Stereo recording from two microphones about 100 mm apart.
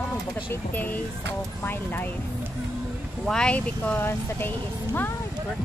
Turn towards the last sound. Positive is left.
turn(degrees=20)  # may be behind; listen again after turning